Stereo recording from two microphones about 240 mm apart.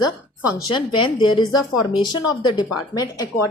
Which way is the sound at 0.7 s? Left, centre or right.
Centre.